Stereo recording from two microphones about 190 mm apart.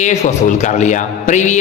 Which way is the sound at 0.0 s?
40° left (ahead or behind).